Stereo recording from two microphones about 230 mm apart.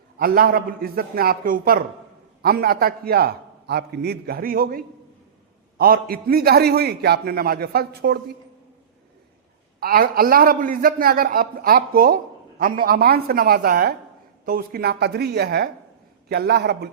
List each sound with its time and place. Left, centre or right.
0.2 s a man's voice: right
9.8 s a man's voice: right